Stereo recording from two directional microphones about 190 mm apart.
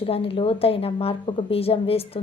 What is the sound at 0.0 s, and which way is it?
A woman's voice, 30° left (ahead or behind).